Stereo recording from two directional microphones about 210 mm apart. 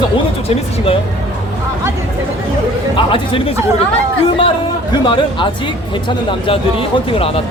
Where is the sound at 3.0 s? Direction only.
25° left (ahead or behind).